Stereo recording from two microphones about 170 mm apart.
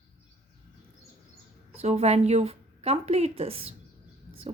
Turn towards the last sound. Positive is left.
turn(degrees=-35)  # may be behind; listen again after turning